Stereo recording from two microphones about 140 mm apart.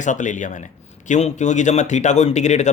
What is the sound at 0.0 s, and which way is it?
Speech, 60° left (ahead or behind).